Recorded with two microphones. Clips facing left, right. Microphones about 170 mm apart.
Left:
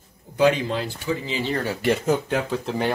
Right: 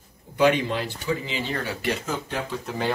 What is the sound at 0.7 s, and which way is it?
Speech, 40° left (ahead or behind).